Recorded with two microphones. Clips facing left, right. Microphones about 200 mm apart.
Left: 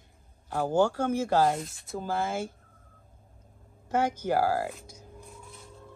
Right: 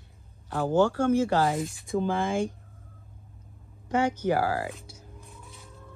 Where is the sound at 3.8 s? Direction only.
10° left (ahead or behind).